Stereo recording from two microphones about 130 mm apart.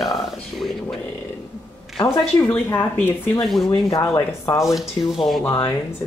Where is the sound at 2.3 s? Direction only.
15° left (ahead or behind).